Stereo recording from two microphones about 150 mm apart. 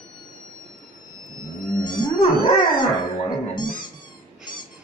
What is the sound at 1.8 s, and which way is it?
Whale vocalization, 30° left (ahead or behind).